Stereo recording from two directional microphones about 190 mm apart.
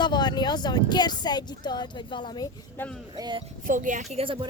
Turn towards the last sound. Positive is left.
turn(degrees=-30)  # may be behind; listen again after turning